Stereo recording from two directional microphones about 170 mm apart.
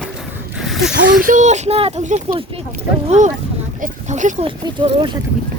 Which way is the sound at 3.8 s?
45° right (ahead or behind).